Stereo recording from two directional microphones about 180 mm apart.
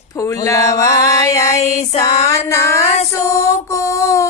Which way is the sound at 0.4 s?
20° left (ahead or behind).